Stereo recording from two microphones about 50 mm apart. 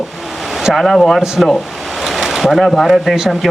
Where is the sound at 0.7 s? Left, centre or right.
Centre.